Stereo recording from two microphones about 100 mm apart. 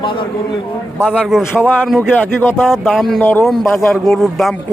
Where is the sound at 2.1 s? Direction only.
20° left (ahead or behind).